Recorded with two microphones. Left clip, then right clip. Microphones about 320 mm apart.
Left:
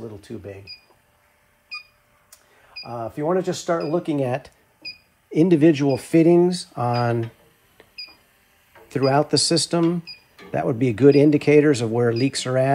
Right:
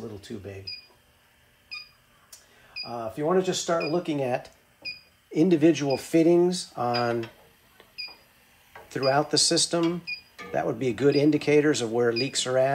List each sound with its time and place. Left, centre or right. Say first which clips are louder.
2.8 s speech: left 3 dB; centre
8.8 s speech: left 4 dB; centre